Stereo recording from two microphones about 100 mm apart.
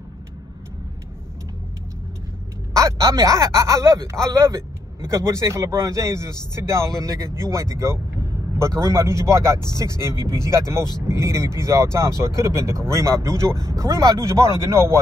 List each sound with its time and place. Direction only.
2.7 s speech: 35° right (ahead or behind)